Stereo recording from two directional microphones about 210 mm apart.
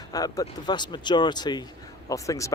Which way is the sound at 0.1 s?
15° left (ahead or behind).